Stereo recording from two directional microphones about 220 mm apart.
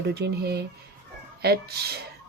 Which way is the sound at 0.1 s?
45° right (ahead or behind).